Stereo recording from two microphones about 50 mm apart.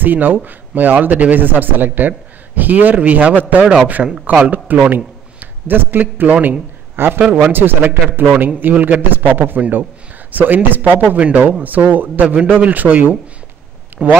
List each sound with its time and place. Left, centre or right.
0.0 s a man's voice: right
7.0 s a man's voice: right
14.0 s speech: right